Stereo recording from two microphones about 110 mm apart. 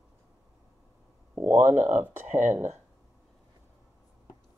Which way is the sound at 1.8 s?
90° right.